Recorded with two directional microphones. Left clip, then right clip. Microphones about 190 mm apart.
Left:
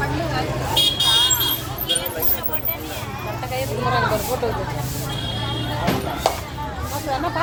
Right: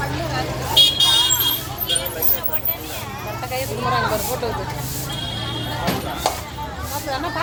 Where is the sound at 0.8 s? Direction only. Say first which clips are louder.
Right 1 dB; 40° left (ahead or behind).